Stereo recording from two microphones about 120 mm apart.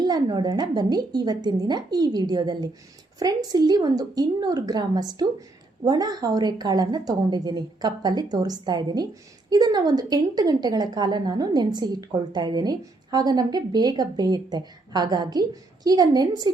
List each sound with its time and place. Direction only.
0.0 s a woman's voice: 35° right (ahead or behind)